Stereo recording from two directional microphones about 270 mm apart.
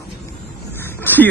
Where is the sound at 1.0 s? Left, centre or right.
Centre.